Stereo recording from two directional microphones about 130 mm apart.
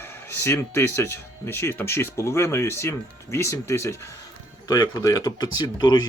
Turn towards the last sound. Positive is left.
turn(degrees=35)  # may be behind; listen again after turning